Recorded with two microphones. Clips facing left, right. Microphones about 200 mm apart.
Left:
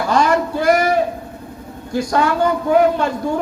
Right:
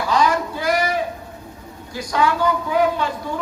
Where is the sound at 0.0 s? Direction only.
50° left (ahead or behind).